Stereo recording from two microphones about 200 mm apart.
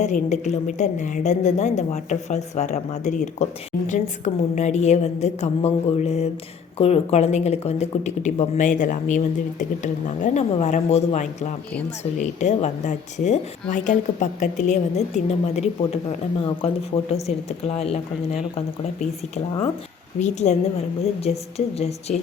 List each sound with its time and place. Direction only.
0.0 s a woman's voice: 35° left (ahead or behind)
20.1 s a woman's voice: 35° left (ahead or behind)